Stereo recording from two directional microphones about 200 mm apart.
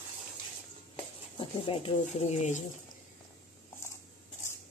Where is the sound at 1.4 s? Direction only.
25° left (ahead or behind).